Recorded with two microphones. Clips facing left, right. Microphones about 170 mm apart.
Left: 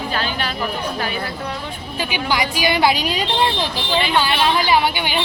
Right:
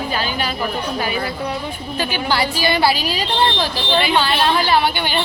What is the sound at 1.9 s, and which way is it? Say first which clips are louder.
A woman's voice: right 1 dB; 15° left (ahead or behind).